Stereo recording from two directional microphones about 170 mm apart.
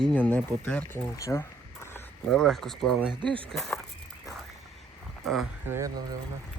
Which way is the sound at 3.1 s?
30° right (ahead or behind).